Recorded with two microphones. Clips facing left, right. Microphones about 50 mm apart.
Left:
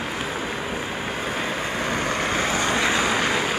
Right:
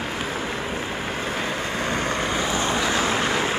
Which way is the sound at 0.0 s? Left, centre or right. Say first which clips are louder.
Even; centre.